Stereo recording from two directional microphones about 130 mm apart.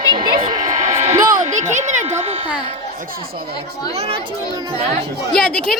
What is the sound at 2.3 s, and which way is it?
Speech, 55° right (ahead or behind).